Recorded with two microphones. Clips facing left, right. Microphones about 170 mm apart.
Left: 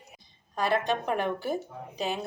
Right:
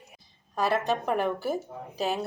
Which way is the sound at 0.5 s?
5° right (ahead or behind).